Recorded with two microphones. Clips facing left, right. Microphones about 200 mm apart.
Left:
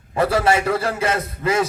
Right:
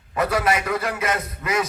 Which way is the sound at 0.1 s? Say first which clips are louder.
Left 4 dB; 30° left (ahead or behind).